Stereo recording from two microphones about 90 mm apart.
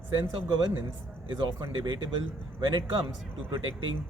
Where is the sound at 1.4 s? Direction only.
55° right (ahead or behind).